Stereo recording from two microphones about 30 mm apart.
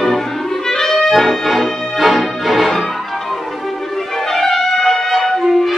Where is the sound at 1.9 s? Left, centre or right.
Centre.